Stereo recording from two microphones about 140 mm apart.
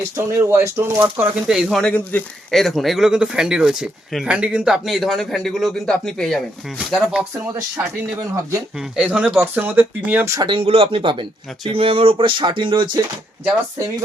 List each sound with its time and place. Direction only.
0.2 s speech: 20° right (ahead or behind); by 1.8 s 5° right (ahead or behind)
1.8 s speech: 10° left (ahead or behind)
6.7 s speech: 10° right (ahead or behind)
8.1 s speech: 20° right (ahead or behind)
8.8 s speech: 5° right (ahead or behind)
10.3 s speech: 35° right (ahead or behind)